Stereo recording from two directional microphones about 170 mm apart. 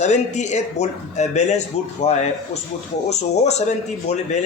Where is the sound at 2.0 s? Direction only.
40° left (ahead or behind).